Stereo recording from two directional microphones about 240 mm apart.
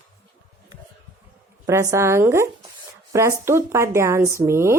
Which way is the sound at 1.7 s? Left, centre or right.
Centre.